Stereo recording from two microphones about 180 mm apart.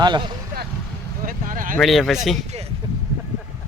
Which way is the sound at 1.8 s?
Centre (ahead or behind).